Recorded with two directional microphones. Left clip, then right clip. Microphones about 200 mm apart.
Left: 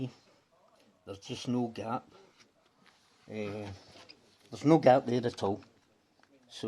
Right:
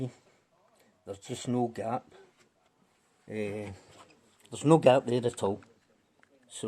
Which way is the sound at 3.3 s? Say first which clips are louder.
Right 3 dB; 30° right (ahead or behind).